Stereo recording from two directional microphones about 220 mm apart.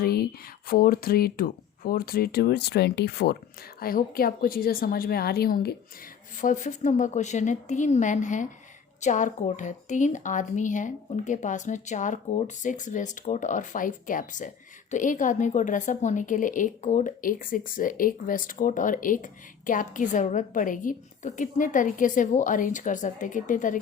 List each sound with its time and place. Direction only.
0.0 s a woman's voice: 45° left (ahead or behind)